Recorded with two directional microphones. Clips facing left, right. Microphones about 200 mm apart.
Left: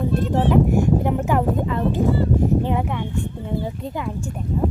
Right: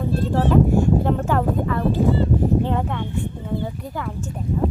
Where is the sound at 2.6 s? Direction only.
15° left (ahead or behind).